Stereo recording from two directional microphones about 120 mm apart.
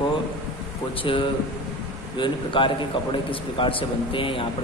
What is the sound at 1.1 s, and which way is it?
A man's voice, 45° left (ahead or behind).